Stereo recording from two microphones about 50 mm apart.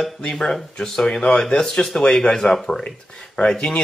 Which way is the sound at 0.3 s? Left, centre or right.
Centre.